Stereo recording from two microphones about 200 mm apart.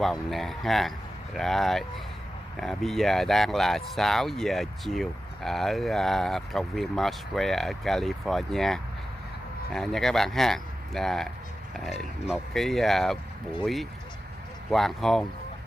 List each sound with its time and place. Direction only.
0.0 s speech: centre (ahead or behind)